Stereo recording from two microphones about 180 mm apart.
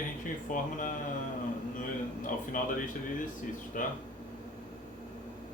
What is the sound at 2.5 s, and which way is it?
Speech, 50° left (ahead or behind).